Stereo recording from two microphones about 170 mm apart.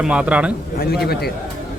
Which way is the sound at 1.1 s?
70° left (ahead or behind).